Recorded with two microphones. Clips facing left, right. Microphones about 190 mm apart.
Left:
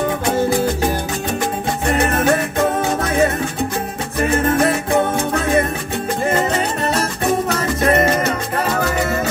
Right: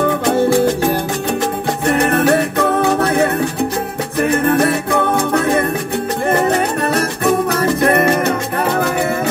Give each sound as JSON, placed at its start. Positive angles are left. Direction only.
{"t": 1.9, "sound": "music", "side_deg": -65}
{"t": 6.8, "sound": "music", "side_deg": -60}